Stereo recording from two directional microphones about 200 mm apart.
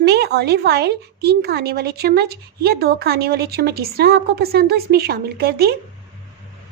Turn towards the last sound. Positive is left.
turn(degrees=-50)  # may be behind; listen again after turning